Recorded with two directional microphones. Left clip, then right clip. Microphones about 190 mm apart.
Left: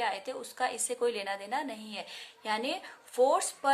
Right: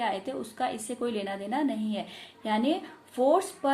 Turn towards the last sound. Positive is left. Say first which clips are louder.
# right 2 dB
turn(degrees=30)  # may be behind; listen again after turning